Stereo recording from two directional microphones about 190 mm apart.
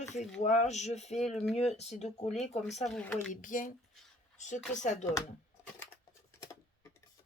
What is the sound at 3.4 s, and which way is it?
Speech, 45° left (ahead or behind).